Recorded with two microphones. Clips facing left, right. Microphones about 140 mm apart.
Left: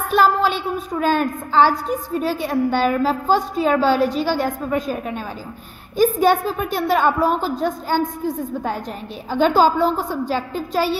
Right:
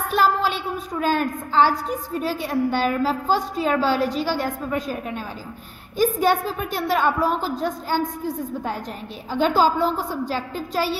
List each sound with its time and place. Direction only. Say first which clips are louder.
0.1 s a sound: left 4 dB; 55° left (ahead or behind)
0.9 s a woman's voice: left 3 dB; 55° left (ahead or behind)
4.4 s a woman's voice: left 4 dB; 40° left (ahead or behind)
5.9 s a woman's voice: left 4 dB; 55° left (ahead or behind)
9.3 s a woman's voice: left 3 dB; 60° left (ahead or behind)